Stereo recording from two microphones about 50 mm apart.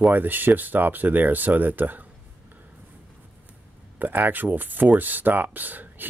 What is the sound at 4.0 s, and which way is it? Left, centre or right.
Speech, right.